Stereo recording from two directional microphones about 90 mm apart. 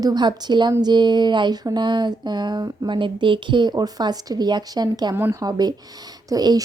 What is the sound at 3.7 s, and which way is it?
A woman's voice, 45° right (ahead or behind).